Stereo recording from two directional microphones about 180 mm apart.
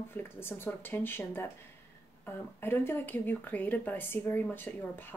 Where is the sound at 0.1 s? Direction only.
10° left (ahead or behind).